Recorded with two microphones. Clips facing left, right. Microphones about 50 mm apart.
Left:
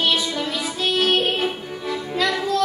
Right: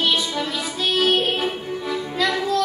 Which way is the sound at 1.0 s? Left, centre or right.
Centre.